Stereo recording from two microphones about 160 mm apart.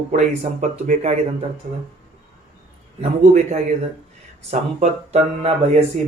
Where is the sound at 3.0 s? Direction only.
45° right (ahead or behind).